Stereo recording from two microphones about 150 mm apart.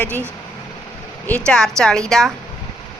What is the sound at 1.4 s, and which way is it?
Speech, 5° left (ahead or behind).